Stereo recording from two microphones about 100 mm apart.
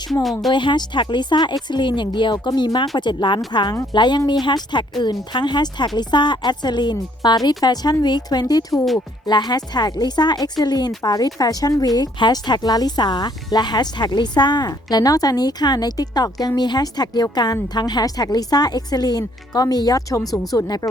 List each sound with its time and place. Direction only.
0.1 s a woman's voice: centre (ahead or behind)
0.5 s a woman's voice: 50° left (ahead or behind)